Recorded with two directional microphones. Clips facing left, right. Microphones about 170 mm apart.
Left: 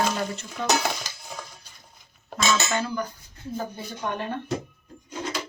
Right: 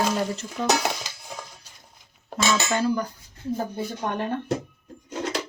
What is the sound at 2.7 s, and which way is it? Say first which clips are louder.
Dishes: right 4 dB; 35° right (ahead or behind).